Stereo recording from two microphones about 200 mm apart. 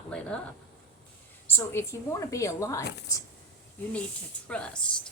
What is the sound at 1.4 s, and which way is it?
A woman's voice, 10° left (ahead or behind).